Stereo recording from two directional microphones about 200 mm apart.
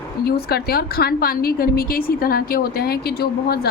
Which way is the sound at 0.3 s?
50° left (ahead or behind).